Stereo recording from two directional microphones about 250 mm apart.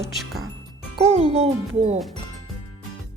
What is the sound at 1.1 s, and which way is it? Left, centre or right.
Speech, right.